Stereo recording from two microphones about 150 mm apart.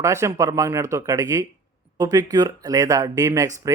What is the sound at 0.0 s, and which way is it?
Speech, 20° right (ahead or behind).